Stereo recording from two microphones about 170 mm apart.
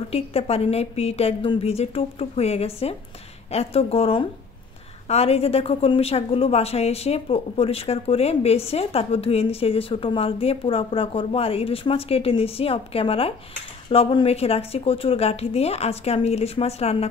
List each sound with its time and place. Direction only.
0.1 s a woman's voice: 35° left (ahead or behind)